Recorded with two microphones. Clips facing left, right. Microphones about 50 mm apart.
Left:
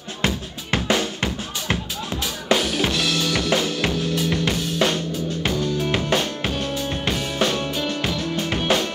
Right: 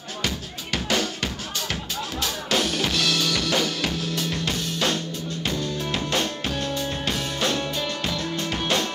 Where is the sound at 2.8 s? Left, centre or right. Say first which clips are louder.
Left 2 dB; centre.